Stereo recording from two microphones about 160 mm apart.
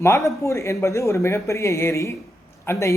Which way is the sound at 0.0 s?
15° left (ahead or behind).